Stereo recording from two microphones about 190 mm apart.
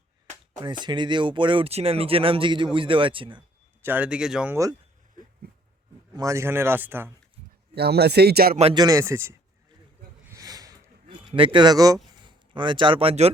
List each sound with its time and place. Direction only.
0.6 s speech: 25° right (ahead or behind)
3.8 s a man's voice: 10° right (ahead or behind)
6.1 s speech: 15° right (ahead or behind)
7.8 s speech: 60° right (ahead or behind)
8.7 s speech: 20° right (ahead or behind)
10.2 s a sound: 15° right (ahead or behind)
11.1 s speech: 30° right (ahead or behind)